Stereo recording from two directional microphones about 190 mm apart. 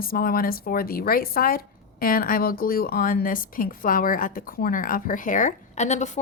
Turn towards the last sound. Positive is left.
turn(degrees=40)  # may be behind; listen again after turning